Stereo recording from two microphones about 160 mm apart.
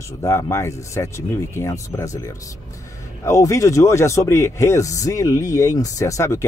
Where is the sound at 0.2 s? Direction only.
15° left (ahead or behind).